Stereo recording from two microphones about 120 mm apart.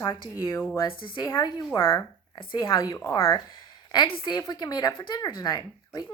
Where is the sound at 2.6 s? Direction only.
30° left (ahead or behind).